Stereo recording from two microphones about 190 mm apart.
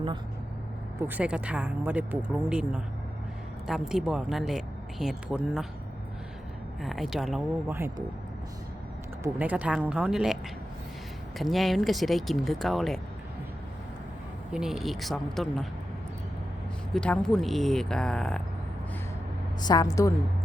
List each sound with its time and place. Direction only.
1.0 s speech: 10° right (ahead or behind)
6.8 s speech: centre (ahead or behind)
7.7 s speech: 10° right (ahead or behind)
9.2 s speech: 10° right (ahead or behind)
11.3 s speech: centre (ahead or behind)
14.5 s speech: 5° right (ahead or behind)
16.9 s speech: 5° left (ahead or behind)
19.6 s a woman's voice: 20° left (ahead or behind)